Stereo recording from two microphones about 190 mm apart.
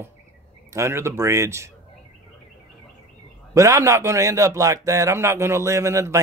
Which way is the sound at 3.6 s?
15° right (ahead or behind).